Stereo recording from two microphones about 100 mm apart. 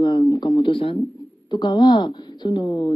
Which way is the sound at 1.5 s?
45° left (ahead or behind).